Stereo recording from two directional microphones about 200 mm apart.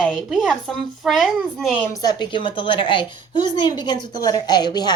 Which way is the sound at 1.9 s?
20° left (ahead or behind).